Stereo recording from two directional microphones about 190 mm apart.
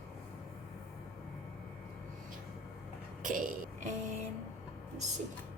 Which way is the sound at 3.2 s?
45° right (ahead or behind).